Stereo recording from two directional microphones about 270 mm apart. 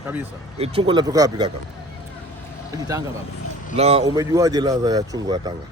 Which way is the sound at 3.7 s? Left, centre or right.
Right.